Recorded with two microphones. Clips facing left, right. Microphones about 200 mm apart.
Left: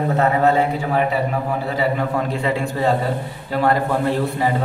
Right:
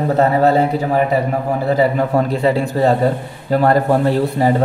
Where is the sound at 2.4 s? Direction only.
35° right (ahead or behind).